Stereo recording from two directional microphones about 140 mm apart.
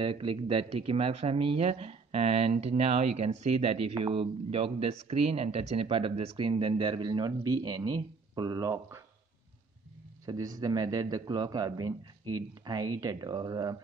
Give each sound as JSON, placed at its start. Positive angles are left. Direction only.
{"t": 0.0, "sound": "speech", "side_deg": -35}
{"t": 10.2, "sound": "a man's voice", "side_deg": -25}